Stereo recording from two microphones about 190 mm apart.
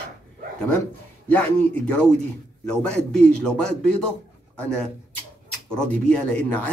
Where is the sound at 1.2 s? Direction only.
10° left (ahead or behind).